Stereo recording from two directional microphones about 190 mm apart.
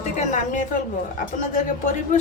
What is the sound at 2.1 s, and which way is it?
Speech, 45° left (ahead or behind).